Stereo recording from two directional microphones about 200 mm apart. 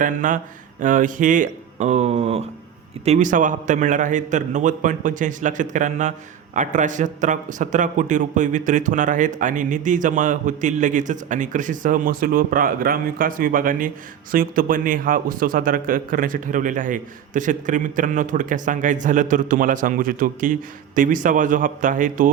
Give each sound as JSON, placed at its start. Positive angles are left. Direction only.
{"t": 0.0, "sound": "a man's voice", "side_deg": -40}